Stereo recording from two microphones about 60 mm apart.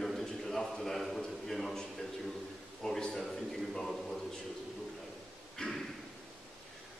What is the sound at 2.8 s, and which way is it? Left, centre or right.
A man's voice, centre.